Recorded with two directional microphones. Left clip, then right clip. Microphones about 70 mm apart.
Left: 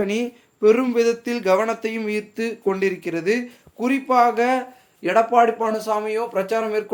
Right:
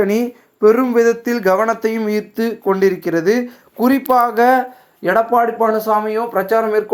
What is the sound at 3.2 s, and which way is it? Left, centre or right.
Speech, left.